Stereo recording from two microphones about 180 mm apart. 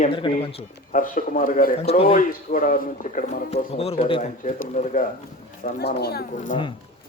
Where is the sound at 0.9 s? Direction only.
45° left (ahead or behind).